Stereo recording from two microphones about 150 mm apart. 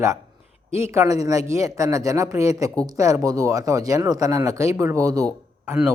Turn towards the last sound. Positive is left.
turn(degrees=-10)  # may be behind; listen again after turning